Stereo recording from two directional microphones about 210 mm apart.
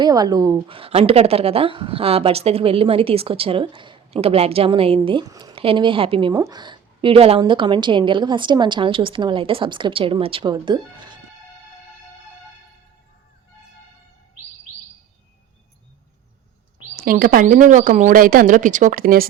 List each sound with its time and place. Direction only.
0.0 s a woman's voice: 20° right (ahead or behind)
16.9 s speech: 45° right (ahead or behind)